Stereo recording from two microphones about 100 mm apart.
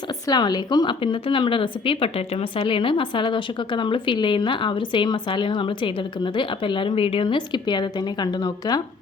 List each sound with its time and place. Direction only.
0.3 s a woman's voice: 45° left (ahead or behind)